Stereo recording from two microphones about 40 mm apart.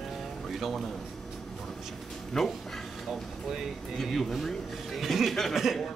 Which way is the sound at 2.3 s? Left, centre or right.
Centre.